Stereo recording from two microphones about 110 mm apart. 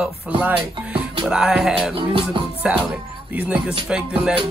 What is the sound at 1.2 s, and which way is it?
Music, 5° right (ahead or behind).